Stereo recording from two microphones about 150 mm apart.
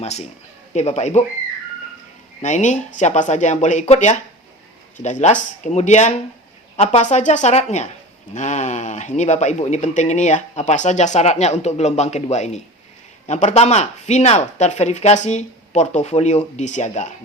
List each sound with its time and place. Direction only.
0.0 s speech: 45° left (ahead or behind)
2.4 s speech: 50° left (ahead or behind)